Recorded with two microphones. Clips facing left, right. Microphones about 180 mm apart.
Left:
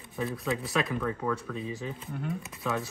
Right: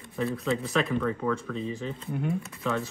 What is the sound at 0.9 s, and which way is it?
Speech, 5° left (ahead or behind).